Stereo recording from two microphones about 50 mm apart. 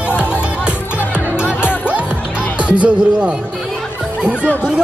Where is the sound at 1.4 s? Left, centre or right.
Left.